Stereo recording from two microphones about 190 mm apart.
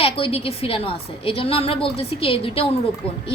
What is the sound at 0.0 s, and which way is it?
A woman's voice, 30° left (ahead or behind).